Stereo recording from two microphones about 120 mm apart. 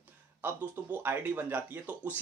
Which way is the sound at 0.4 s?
15° right (ahead or behind).